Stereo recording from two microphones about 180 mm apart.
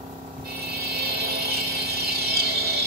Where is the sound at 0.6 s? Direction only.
60° right (ahead or behind).